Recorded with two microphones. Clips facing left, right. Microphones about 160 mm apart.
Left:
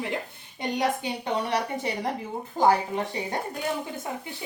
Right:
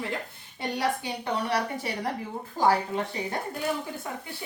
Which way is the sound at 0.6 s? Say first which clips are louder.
Left 2 dB; 20° left (ahead or behind).